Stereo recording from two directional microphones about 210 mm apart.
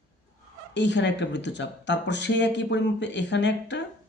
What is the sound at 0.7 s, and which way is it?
Speech, 55° left (ahead or behind).